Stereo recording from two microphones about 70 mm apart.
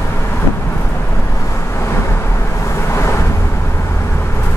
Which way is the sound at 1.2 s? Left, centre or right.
Left.